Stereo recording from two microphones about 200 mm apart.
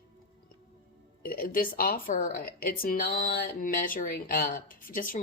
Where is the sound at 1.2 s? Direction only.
45° left (ahead or behind).